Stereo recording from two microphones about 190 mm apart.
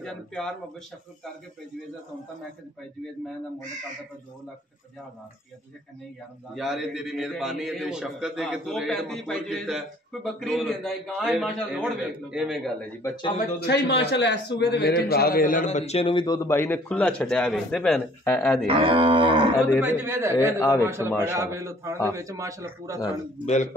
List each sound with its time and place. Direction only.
0.0 s a man's voice: centre (ahead or behind)
6.5 s a man's voice: centre (ahead or behind)
13.0 s a man's voice: 20° left (ahead or behind)
13.6 s a man's voice: 65° left (ahead or behind); by 18.5 s 10° left (ahead or behind)
18.9 s cattle: 25° right (ahead or behind)
19.8 s speech: 10° right (ahead or behind)
20.5 s a man's voice: 15° left (ahead or behind)
20.8 s speech: 15° right (ahead or behind)
23.4 s speech: 40° left (ahead or behind)